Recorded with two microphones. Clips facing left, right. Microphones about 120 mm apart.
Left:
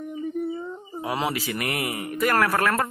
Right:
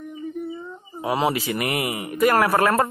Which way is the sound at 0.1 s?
40° left (ahead or behind).